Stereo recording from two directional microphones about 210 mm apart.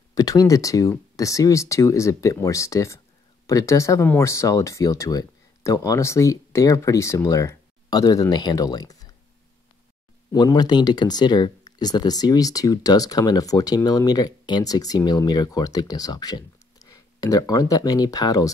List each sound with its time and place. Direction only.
0.1 s speech: 15° left (ahead or behind)
10.3 s speech: 20° left (ahead or behind)